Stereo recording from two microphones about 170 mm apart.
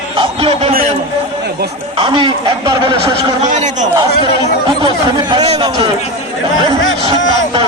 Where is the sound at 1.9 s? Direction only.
30° right (ahead or behind).